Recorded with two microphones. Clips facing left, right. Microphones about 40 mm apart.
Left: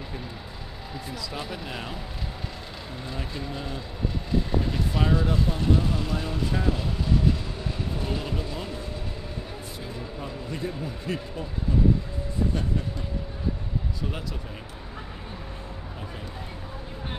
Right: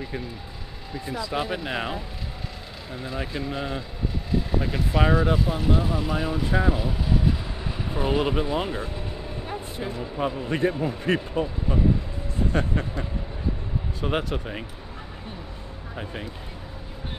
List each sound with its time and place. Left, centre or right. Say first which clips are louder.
1.1 s speech: right 9 dB; right
3.0 s speech: right 5 dB; centre
7.9 s speech: right 11 dB; right
9.5 s a sound: right 6 dB; right
10.1 s a man's voice: right 12 dB; right
10.7 s speech: right 7 dB; right
11.1 s a man's voice: right 9 dB; right
14.0 s a man's voice: right 7 dB; right